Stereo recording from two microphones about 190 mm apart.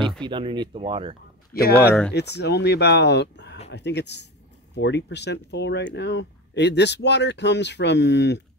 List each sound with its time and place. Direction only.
0.2 s speech: 25° right (ahead or behind)
1.5 s speech: 55° left (ahead or behind)
1.8 s speech: 5° left (ahead or behind)
2.1 s speech: 60° left (ahead or behind)